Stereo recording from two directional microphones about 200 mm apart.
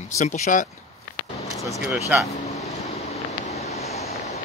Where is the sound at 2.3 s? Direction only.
35° left (ahead or behind).